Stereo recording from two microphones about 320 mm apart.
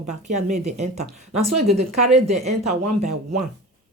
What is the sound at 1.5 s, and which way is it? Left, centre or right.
Speech, right.